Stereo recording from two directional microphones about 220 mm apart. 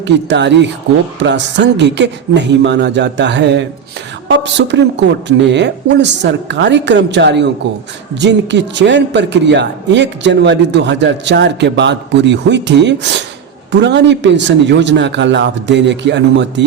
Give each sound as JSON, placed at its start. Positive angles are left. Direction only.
{"t": 0.0, "sound": "a man's voice", "side_deg": -50}